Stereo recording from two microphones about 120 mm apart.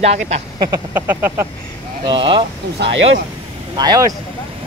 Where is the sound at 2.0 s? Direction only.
45° right (ahead or behind).